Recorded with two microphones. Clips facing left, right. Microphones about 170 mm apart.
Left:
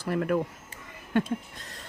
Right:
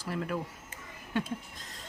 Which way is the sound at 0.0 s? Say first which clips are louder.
Left 8 dB; 60° left (ahead or behind).